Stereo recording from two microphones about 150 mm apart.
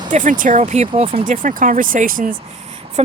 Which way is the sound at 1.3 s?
65° right (ahead or behind).